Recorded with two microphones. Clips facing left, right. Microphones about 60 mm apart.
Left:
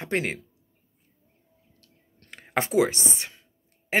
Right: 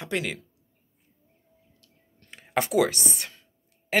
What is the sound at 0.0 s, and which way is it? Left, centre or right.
Speech, left.